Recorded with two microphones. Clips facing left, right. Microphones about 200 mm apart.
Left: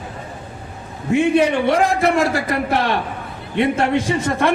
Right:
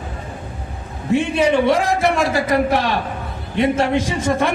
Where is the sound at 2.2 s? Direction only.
60° left (ahead or behind).